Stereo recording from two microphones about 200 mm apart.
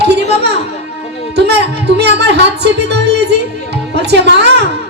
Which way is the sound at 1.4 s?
55° right (ahead or behind).